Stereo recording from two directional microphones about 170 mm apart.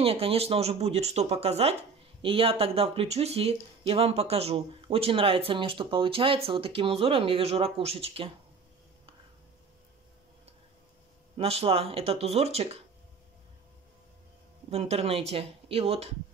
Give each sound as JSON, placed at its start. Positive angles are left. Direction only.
{"t": 0.0, "sound": "speech", "side_deg": -35}
{"t": 11.3, "sound": "speech", "side_deg": -35}
{"t": 14.7, "sound": "speech", "side_deg": -40}